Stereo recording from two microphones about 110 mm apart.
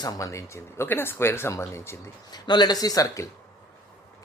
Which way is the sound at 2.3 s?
40° left (ahead or behind).